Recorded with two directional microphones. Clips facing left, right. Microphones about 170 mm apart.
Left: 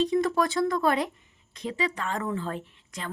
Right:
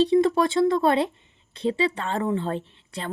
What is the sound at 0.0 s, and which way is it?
A woman's voice, 30° right (ahead or behind).